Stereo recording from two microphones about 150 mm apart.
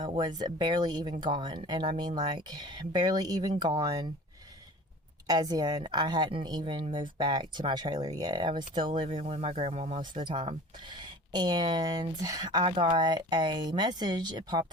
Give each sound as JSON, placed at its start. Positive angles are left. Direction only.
{"t": 0.0, "sound": "a woman's voice", "side_deg": -30}
{"t": 5.3, "sound": "a woman's voice", "side_deg": -25}
{"t": 10.0, "sound": "a woman's voice", "side_deg": -30}